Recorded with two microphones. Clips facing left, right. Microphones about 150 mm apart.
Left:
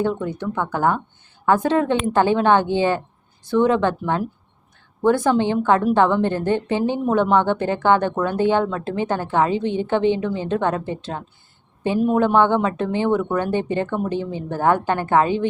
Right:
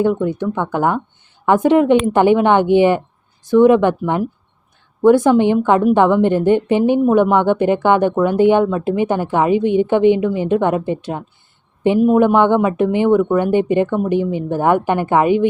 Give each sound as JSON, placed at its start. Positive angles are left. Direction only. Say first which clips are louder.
{"t": 0.0, "sound": "a woman's voice", "louder": "right 6 dB", "side_deg": -15}